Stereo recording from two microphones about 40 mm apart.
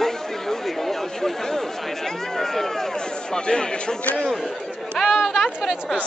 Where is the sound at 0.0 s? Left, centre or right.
Centre.